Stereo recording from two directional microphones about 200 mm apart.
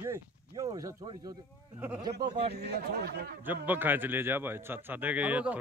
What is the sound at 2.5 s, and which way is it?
Speech, 55° right (ahead or behind).